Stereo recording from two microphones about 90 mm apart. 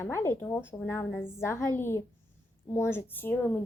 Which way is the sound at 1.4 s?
30° left (ahead or behind).